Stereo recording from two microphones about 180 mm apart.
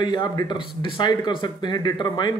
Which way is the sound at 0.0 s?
25° left (ahead or behind).